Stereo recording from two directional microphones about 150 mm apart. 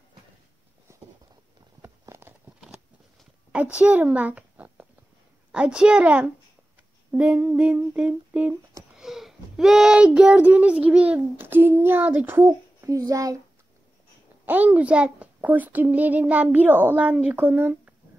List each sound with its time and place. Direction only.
0.9 s a sound: 20° right (ahead or behind)
3.7 s a child's voice: 10° right (ahead or behind)
14.4 s a child's voice: 10° right (ahead or behind)